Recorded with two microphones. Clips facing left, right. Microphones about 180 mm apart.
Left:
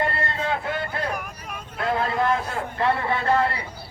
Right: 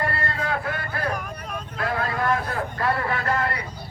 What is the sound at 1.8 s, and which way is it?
A man's voice, 25° left (ahead or behind).